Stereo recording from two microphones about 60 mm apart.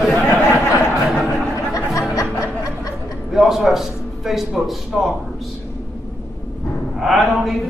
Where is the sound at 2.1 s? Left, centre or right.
Left.